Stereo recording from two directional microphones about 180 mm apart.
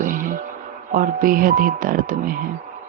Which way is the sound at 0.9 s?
50° right (ahead or behind).